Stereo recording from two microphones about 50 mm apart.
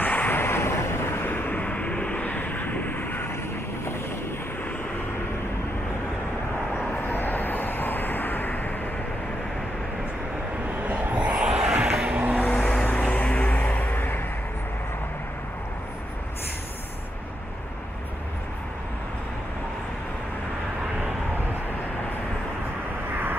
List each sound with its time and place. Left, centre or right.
0.0 s vehicle: left
1.6 s vehicle: left
2.2 s vehicle: left
6.9 s vehicle: left
10.8 s a sound: right
12.4 s vehicle: left
13.9 s music: left